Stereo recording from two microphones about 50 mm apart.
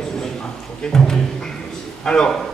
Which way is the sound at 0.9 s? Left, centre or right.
Centre.